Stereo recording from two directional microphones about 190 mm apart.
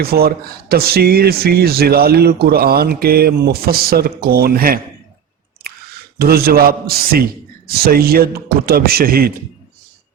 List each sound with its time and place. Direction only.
0.0 s speech: 55° right (ahead or behind)
5.7 s a sound: 55° right (ahead or behind)
6.1 s a man's voice: 55° right (ahead or behind)